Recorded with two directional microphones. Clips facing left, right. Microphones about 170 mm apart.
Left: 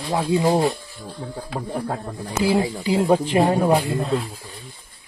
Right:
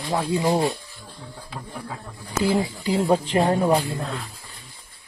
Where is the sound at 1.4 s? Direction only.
65° left (ahead or behind).